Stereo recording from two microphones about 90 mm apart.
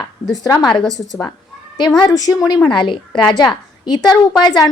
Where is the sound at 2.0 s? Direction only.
45° left (ahead or behind).